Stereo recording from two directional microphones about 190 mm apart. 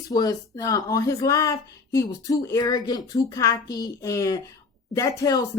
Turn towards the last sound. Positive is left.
turn(degrees=20)  # may be behind; listen again after turning